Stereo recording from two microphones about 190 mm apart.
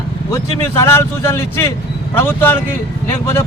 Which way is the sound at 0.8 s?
15° left (ahead or behind).